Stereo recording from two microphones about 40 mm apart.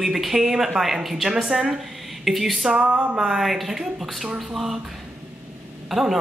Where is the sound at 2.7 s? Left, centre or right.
Right.